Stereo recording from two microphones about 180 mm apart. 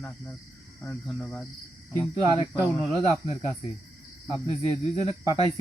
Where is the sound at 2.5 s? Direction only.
10° right (ahead or behind).